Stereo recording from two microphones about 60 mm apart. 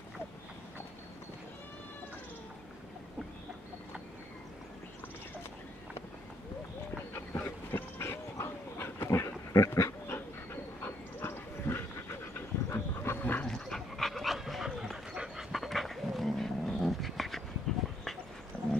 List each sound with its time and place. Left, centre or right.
7.3 s train: left
8.0 s dog: left
9.5 s dog: left
10.0 s dog: left
13.2 s dog: left
13.5 s dog: centre
18.5 s horse: centre